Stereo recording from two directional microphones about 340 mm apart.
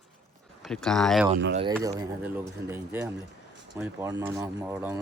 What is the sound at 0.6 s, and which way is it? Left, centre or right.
A man's voice, centre.